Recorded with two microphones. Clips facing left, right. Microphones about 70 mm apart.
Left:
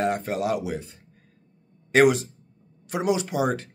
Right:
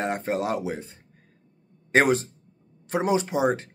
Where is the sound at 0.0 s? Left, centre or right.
Right.